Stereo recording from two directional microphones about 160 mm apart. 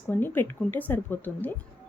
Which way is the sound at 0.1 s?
15° left (ahead or behind).